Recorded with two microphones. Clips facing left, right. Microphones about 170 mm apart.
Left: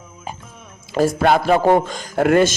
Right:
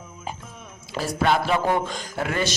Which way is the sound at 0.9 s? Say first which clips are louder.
Left 7 dB; 50° left (ahead or behind).